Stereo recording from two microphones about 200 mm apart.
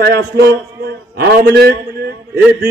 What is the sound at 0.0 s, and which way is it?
A man's voice, 50° right (ahead or behind).